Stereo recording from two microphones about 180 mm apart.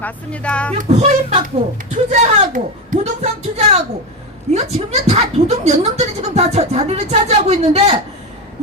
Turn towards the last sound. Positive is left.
turn(degrees=-35)  # may be behind; listen again after turning